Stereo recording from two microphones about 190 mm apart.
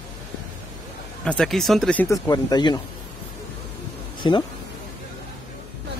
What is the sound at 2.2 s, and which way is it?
Speech, 20° left (ahead or behind).